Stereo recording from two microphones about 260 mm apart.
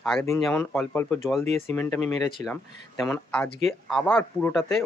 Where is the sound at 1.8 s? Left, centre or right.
Centre.